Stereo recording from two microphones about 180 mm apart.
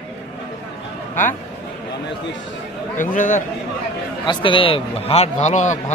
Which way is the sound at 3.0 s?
45° left (ahead or behind).